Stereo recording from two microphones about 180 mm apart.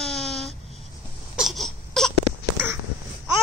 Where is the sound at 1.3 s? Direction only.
Centre (ahead or behind).